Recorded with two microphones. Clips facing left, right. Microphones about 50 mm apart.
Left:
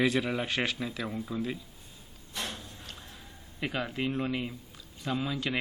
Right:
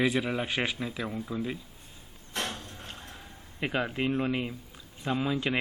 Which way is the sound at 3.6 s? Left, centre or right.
Right.